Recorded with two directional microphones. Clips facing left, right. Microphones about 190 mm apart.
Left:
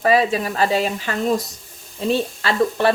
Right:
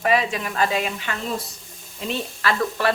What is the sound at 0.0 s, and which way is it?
Speech, 35° left (ahead or behind).